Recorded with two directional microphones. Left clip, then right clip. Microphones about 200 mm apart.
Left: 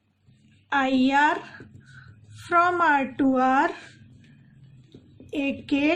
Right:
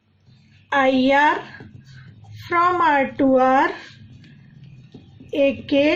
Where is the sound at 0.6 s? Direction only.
45° left (ahead or behind).